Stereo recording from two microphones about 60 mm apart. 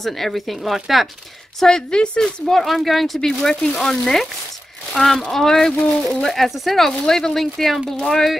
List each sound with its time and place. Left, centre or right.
0.0 s a woman's voice: centre
1.6 s a woman's voice: centre